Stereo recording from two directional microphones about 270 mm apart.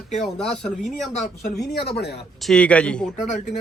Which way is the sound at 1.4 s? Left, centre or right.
Left.